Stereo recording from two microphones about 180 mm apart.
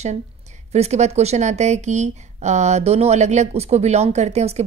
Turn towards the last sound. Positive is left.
turn(degrees=-35)  # may be behind; listen again after turning